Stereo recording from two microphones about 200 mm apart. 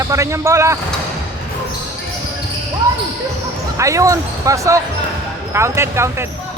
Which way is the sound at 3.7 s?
15° right (ahead or behind).